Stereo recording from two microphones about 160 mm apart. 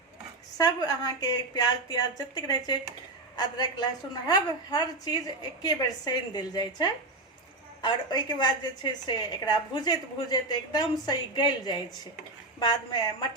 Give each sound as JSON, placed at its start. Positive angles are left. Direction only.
{"t": 0.5, "sound": "a woman's voice", "side_deg": 25}